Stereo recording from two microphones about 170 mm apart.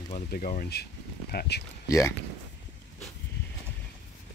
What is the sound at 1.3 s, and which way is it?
Speech, 80° left.